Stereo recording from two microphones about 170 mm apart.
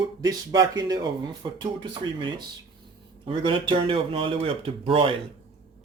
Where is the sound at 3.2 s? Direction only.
30° right (ahead or behind).